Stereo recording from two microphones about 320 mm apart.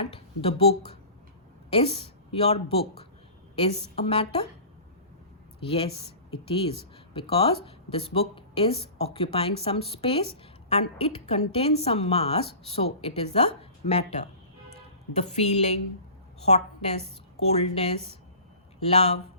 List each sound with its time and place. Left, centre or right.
0.0 s a woman's voice: centre
5.5 s a woman's voice: centre